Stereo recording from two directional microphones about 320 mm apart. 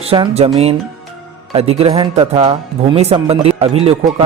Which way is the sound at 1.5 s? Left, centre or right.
Centre.